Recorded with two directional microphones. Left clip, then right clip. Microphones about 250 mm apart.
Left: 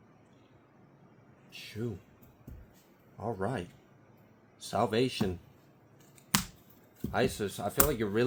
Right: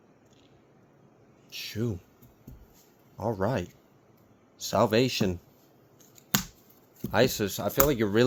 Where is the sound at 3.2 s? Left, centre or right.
Right.